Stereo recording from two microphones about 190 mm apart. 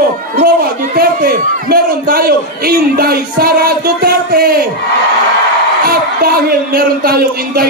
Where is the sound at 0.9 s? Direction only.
50° right (ahead or behind).